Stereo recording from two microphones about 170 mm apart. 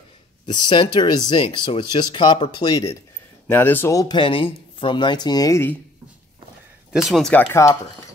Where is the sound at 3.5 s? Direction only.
10° left (ahead or behind).